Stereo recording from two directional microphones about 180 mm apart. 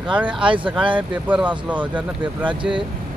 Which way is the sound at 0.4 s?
30° right (ahead or behind).